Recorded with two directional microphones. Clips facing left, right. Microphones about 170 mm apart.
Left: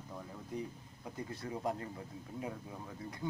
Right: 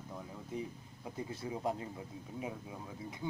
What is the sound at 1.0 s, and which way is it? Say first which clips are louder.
Speech: right 1 dB; 25° right (ahead or behind).